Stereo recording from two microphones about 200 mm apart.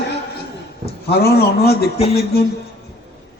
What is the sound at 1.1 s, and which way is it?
Speech, 50° left (ahead or behind).